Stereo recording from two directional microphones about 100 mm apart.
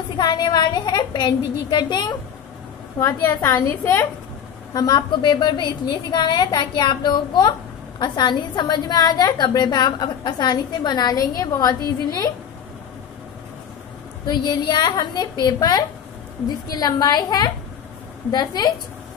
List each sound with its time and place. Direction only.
0.2 s speech: 45° left (ahead or behind)
3.0 s a woman's voice: 30° left (ahead or behind)
4.7 s a woman's voice: 45° left (ahead or behind)
14.2 s a woman's voice: 45° left (ahead or behind)